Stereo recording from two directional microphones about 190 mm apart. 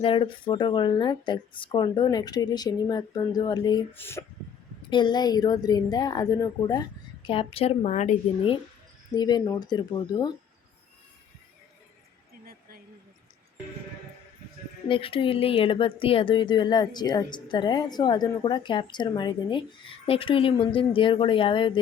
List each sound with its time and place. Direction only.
0.0 s speech: 25° left (ahead or behind)
3.9 s speech: 10° left (ahead or behind)
4.9 s speech: 25° left (ahead or behind)
9.1 s speech: 20° left (ahead or behind)
12.5 s a sound: 50° right (ahead or behind)
14.8 s speech: 30° left (ahead or behind)